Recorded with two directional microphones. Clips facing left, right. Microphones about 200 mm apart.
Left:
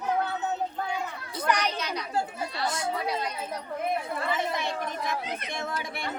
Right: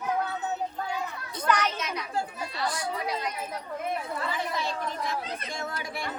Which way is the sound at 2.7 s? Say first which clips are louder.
Left 2 dB; 25° left (ahead or behind).